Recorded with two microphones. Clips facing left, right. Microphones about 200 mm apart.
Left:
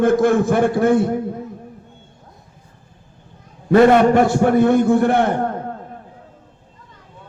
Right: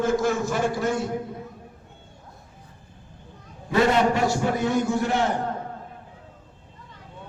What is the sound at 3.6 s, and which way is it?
A man's voice, 55° left (ahead or behind).